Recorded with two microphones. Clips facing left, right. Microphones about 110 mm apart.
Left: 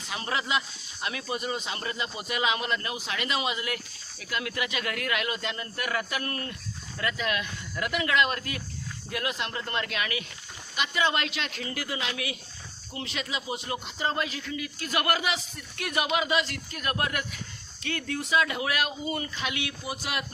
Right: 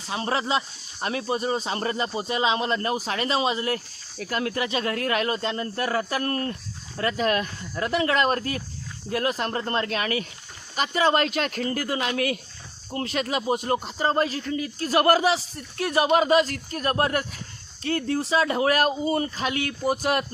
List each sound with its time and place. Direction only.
0.1 s speech: 35° right (ahead or behind)